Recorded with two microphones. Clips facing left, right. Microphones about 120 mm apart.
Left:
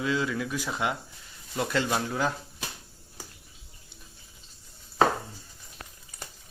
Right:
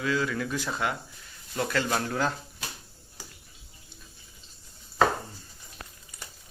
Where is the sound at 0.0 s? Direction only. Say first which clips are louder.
Even; 20° left (ahead or behind).